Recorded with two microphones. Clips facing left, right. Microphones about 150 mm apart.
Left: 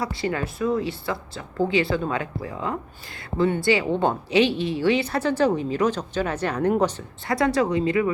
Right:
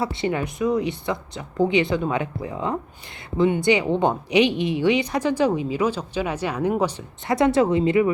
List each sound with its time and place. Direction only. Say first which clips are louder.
0.0 s speech: right 2 dB; 20° right (ahead or behind)
7.3 s speech: right 3 dB; 20° right (ahead or behind)